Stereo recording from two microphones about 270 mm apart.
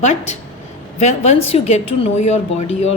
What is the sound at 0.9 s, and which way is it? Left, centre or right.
A woman's voice, left.